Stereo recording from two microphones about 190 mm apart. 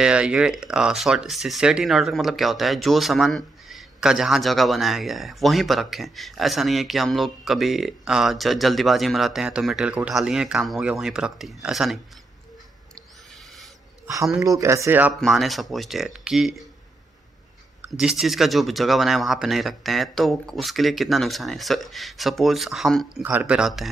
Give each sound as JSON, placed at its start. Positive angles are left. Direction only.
{"t": 0.0, "sound": "speech", "side_deg": -5}
{"t": 14.0, "sound": "speech", "side_deg": -15}
{"t": 17.8, "sound": "speech", "side_deg": -5}